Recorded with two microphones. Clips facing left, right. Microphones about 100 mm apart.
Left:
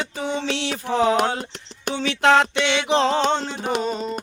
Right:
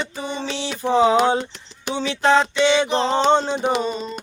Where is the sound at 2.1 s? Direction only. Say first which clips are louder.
Left 1 dB; 65° left (ahead or behind); by 3.1 s 90° left.